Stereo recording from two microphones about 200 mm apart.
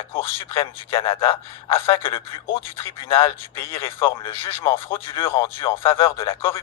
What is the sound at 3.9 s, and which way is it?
Speech, 25° left (ahead or behind).